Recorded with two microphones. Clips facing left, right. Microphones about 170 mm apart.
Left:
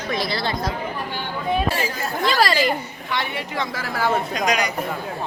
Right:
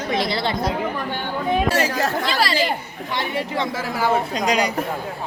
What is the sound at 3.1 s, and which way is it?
A woman's voice, 40° right (ahead or behind).